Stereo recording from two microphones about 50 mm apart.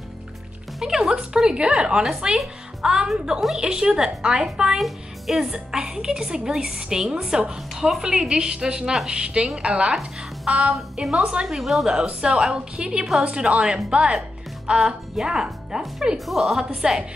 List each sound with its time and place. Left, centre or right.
0.7 s a woman's voice: centre
4.7 s a child's voice: centre
5.4 s a woman's voice: centre
9.9 s a woman's voice: centre
12.1 s a woman's voice: centre
16.3 s a woman's voice: centre
16.8 s a woman's voice: centre